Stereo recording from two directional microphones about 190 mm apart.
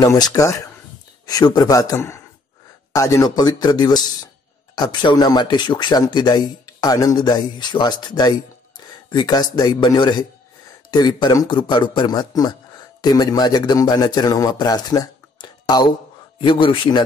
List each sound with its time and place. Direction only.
0.0 s speech: 20° left (ahead or behind)